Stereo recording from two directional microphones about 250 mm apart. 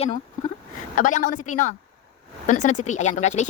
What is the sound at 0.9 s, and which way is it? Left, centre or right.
A woman's voice, left.